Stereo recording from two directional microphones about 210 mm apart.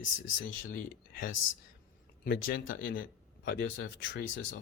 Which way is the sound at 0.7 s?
40° left (ahead or behind).